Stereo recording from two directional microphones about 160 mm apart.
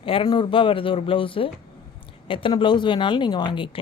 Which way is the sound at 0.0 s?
35° left (ahead or behind).